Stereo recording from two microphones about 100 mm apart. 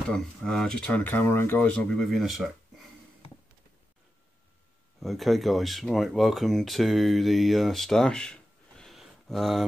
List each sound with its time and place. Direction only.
0.1 s speech: 5° left (ahead or behind)
5.0 s speech: centre (ahead or behind)